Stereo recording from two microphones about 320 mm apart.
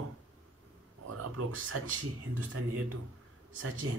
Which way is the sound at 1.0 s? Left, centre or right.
Right.